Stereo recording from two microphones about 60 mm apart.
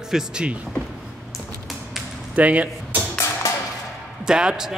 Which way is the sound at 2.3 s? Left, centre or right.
Right.